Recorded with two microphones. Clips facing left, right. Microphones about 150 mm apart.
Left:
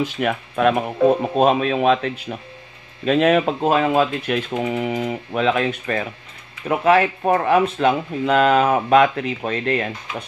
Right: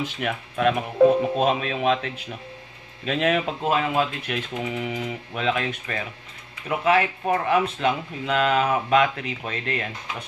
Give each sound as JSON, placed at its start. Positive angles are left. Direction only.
{"t": 0.0, "sound": "speech", "side_deg": 55}
{"t": 3.6, "sound": "speech", "side_deg": 40}